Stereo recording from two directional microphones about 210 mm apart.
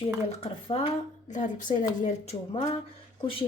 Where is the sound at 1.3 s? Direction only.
35° left (ahead or behind).